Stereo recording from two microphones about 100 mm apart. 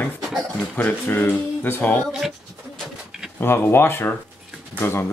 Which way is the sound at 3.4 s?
25° left (ahead or behind).